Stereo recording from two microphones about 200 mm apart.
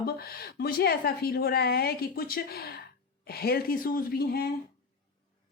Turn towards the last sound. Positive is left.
turn(degrees=50)  # may be behind; listen again after turning